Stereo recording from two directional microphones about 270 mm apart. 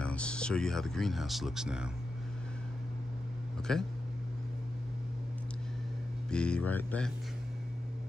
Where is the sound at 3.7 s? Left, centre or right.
Centre.